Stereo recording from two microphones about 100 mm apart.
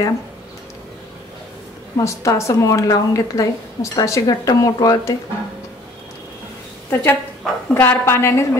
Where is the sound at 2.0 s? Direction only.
30° left (ahead or behind).